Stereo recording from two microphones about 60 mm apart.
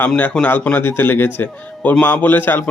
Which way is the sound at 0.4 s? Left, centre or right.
Left.